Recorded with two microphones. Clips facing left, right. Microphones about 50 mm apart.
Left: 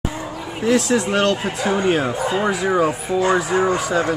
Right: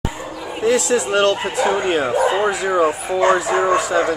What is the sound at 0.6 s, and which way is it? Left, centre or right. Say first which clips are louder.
Speech: right 1 dB; centre.